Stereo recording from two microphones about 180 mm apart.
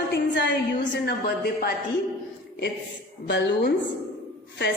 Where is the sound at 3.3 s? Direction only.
75° left (ahead or behind).